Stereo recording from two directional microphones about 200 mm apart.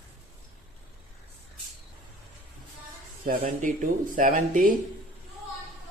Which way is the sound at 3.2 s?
40° right (ahead or behind).